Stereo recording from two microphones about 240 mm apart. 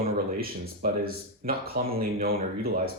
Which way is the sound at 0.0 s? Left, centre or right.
Right.